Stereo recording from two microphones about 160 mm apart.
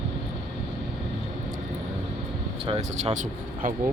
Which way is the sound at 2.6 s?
40° right (ahead or behind).